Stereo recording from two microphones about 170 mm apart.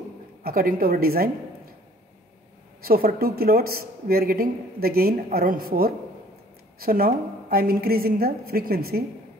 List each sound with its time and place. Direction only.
0.4 s speech: 60° right (ahead or behind)
2.8 s speech: 60° right (ahead or behind)